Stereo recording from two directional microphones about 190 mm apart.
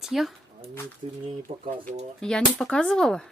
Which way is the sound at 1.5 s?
30° right (ahead or behind).